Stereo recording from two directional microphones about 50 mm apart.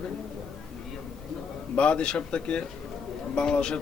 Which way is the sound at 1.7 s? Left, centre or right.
Left.